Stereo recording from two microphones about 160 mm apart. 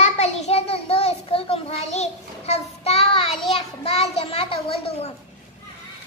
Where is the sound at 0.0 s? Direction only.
45° left (ahead or behind).